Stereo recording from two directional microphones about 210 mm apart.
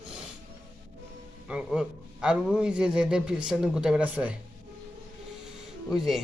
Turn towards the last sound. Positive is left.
turn(degrees=0)  # may be behind; listen again after turning